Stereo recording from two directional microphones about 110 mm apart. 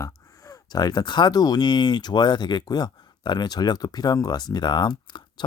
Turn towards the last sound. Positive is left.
turn(degrees=45)  # may be behind; listen again after turning